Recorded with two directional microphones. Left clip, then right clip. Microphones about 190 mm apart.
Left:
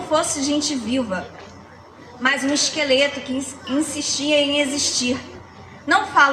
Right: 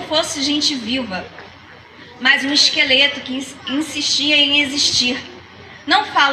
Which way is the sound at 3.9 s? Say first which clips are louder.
Right 6 dB; 25° right (ahead or behind).